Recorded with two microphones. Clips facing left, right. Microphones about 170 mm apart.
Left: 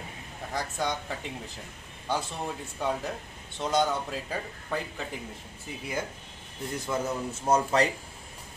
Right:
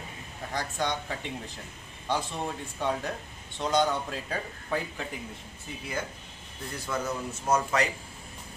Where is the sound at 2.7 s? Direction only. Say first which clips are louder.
Even; 5° left (ahead or behind).